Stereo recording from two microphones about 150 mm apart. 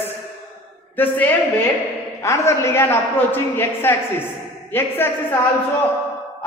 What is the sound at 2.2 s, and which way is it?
A man's voice, 20° left (ahead or behind).